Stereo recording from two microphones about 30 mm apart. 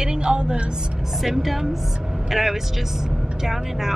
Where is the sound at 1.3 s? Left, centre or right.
Centre.